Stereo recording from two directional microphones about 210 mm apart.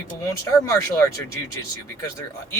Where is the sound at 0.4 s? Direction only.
15° left (ahead or behind).